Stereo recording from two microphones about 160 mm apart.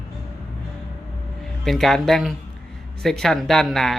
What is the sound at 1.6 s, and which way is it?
A woman's voice, centre (ahead or behind).